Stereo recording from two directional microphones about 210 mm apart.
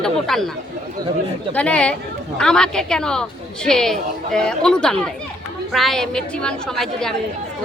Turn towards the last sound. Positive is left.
turn(degrees=0)  # may be behind; listen again after turning